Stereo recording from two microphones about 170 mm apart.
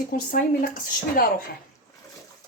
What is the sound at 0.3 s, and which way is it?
Speech, 55° left (ahead or behind).